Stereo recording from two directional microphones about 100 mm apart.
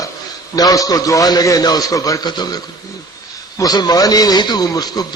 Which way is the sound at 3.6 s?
40° left (ahead or behind).